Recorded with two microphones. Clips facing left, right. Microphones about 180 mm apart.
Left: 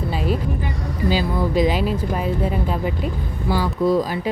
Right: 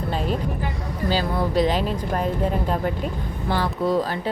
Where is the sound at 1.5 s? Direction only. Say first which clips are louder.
Left 2 dB; 10° left (ahead or behind).